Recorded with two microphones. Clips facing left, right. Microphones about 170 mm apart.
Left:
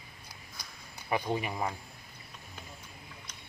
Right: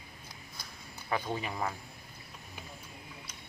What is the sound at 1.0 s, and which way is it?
Speech, 15° left (ahead or behind).